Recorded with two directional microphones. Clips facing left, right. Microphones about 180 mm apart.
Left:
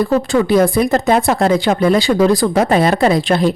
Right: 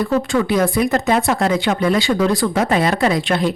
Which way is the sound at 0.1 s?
35° left (ahead or behind).